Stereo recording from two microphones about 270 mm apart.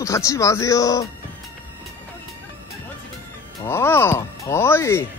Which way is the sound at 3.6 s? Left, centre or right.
Centre.